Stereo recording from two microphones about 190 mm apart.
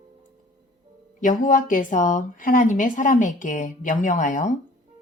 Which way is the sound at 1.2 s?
45° left (ahead or behind).